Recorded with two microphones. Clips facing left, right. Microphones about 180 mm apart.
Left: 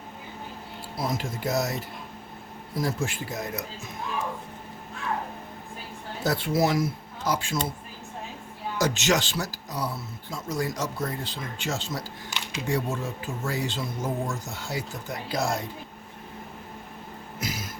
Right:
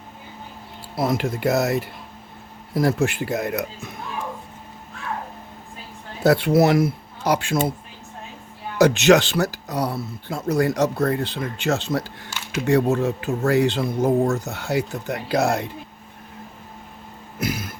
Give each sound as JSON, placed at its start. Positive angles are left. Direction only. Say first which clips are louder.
{"t": 0.9, "sound": "speech", "louder": "right 8 dB", "side_deg": -65}
{"t": 6.2, "sound": "speech", "louder": "right 8 dB", "side_deg": -65}
{"t": 8.8, "sound": "speech", "louder": "right 10 dB", "side_deg": -65}
{"t": 17.4, "sound": "a sound", "louder": "right 8 dB", "side_deg": -60}